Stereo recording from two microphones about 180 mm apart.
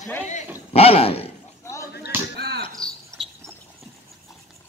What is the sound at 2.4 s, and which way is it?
Cricket, 65° right (ahead or behind).